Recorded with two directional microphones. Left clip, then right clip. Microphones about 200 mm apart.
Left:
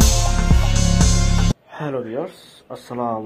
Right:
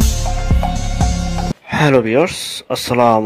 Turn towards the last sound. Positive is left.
turn(degrees=-40)  # may be behind; listen again after turning